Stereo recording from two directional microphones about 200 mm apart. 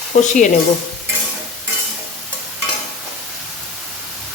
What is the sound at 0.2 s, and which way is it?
Speech, 40° left (ahead or behind).